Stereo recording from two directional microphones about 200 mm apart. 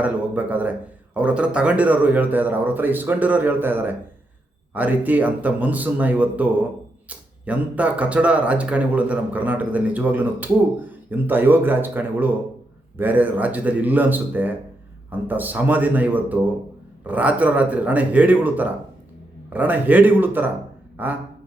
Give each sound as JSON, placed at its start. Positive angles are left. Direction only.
{"t": 0.0, "sound": "speech", "side_deg": -5}